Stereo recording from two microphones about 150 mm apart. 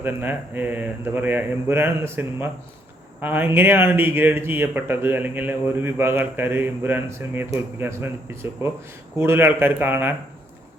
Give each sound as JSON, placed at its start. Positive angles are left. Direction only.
{"t": 0.0, "sound": "speech", "side_deg": -15}